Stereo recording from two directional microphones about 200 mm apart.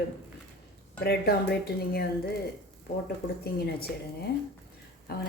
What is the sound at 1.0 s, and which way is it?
Speech, 50° left (ahead or behind).